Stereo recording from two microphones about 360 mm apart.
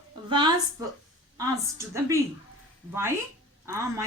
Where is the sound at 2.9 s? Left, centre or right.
Centre.